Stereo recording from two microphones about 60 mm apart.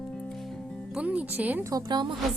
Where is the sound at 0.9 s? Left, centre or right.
Right.